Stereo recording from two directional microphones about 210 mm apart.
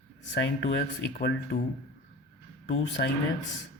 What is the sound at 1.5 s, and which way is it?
Speech, 40° left (ahead or behind).